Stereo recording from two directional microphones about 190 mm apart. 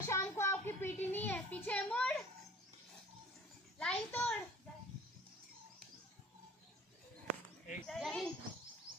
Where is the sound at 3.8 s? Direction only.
5° left (ahead or behind).